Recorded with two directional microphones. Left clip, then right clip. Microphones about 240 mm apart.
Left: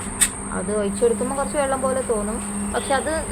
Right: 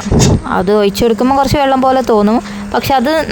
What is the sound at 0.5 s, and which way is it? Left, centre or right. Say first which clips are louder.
Speech: right 13 dB; right.